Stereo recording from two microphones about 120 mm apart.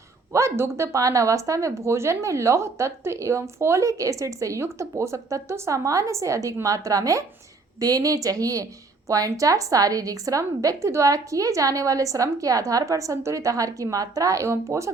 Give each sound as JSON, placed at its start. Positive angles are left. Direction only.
{"t": 0.3, "sound": "speech", "side_deg": -25}